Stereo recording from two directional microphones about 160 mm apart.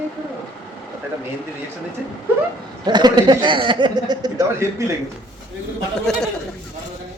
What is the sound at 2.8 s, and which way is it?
Speech, 25° right (ahead or behind).